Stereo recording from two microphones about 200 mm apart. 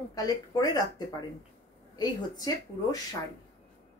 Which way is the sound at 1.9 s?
20° left (ahead or behind).